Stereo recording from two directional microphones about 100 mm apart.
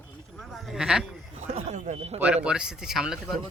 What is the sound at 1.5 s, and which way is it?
Speech, 85° right.